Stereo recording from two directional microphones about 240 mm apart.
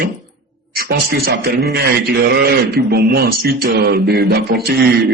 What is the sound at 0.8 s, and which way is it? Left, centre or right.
Speech, right.